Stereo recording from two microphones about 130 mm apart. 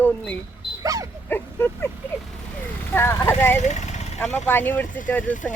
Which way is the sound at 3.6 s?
65° left (ahead or behind).